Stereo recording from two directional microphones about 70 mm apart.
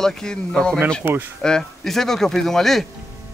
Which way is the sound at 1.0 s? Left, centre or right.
Right.